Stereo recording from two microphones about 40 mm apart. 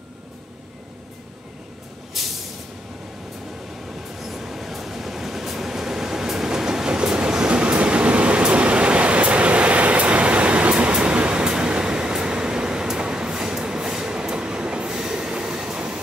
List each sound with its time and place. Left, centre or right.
2.1 s vehicle: centre
4.2 s train: centre; by 16.0 s right